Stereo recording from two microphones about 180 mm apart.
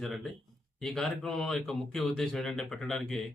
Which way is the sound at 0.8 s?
5° left (ahead or behind).